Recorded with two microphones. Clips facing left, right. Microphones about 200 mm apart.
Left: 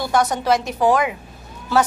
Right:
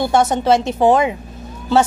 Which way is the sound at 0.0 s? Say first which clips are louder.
Right 4 dB; 25° right (ahead or behind).